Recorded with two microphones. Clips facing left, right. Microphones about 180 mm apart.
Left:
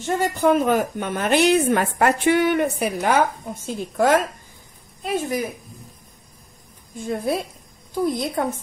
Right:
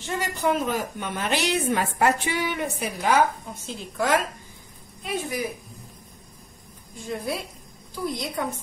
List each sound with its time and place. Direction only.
0.0 s a woman's voice: 50° left (ahead or behind)
7.1 s a woman's voice: 50° left (ahead or behind)